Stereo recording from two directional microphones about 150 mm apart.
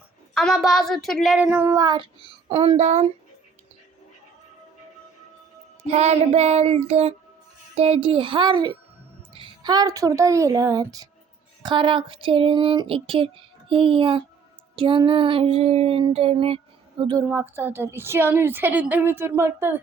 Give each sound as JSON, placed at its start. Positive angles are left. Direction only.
{"t": 0.3, "sound": "speech", "side_deg": 0}
{"t": 1.5, "sound": "a woman's voice", "side_deg": -15}
{"t": 1.8, "sound": "a sound", "side_deg": -30}
{"t": 2.5, "sound": "child singing", "side_deg": -40}
{"t": 5.9, "sound": "child singing", "side_deg": -45}
{"t": 7.8, "sound": "a sound", "side_deg": -45}
{"t": 9.3, "sound": "a woman's voice", "side_deg": -30}
{"t": 11.6, "sound": "a sound", "side_deg": -30}
{"t": 17.0, "sound": "speech", "side_deg": -30}
{"t": 17.2, "sound": "a woman's voice", "side_deg": -15}